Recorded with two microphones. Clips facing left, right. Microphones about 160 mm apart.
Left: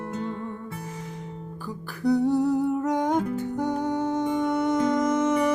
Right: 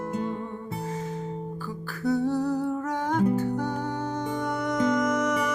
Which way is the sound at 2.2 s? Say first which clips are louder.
Left 3 dB; 20° left (ahead or behind).